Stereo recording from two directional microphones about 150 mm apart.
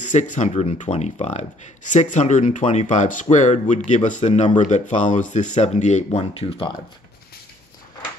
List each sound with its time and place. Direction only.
0.0 s speech: 55° left (ahead or behind)